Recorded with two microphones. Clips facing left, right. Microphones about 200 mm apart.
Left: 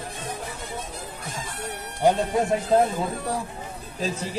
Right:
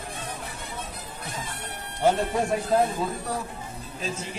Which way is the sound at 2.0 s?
15° left (ahead or behind).